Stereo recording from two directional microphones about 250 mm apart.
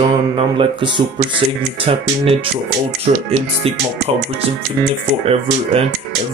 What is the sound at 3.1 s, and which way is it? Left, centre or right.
Speech, right.